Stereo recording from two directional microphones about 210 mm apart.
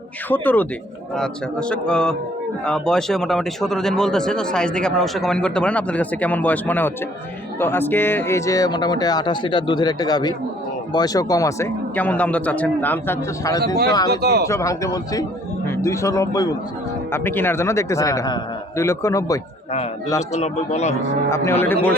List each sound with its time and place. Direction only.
0.3 s a man's voice: 10° left (ahead or behind)
14.1 s speech: 50° right (ahead or behind)
14.4 s a man's voice: 15° left (ahead or behind)
20.3 s speech: 30° left (ahead or behind)
21.2 s a man's voice: 15° left (ahead or behind)